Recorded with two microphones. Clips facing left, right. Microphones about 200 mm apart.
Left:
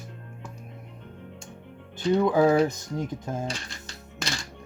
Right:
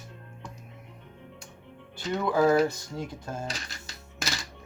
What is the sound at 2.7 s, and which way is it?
Speech, 20° left (ahead or behind).